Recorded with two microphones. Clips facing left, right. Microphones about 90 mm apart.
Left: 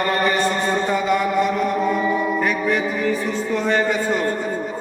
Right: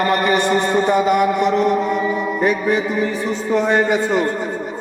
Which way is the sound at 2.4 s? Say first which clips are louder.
Right 3 dB; 15° right (ahead or behind).